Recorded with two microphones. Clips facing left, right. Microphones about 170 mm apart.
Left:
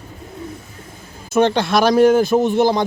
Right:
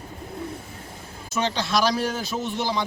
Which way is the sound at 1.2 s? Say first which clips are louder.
Left 10 dB; 55° left (ahead or behind).